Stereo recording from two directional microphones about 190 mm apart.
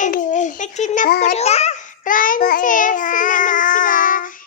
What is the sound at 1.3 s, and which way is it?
Babbling, 35° left (ahead or behind).